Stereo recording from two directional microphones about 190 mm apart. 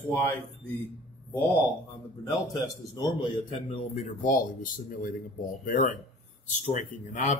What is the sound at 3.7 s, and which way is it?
Speech, 35° left (ahead or behind).